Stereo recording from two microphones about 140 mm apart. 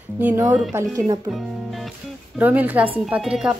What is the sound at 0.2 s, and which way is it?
Speech, 10° right (ahead or behind).